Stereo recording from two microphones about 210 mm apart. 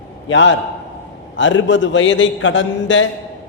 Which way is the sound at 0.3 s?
65° left (ahead or behind).